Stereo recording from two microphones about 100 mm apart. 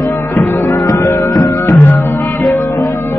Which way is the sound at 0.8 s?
35° left (ahead or behind).